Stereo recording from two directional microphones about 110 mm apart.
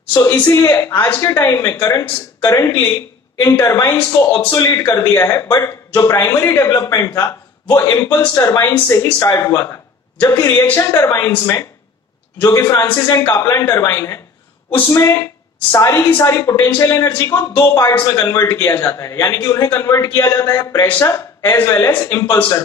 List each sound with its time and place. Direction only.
0.4 s a man's voice: 20° left (ahead or behind)
17.6 s a man's voice: 30° left (ahead or behind)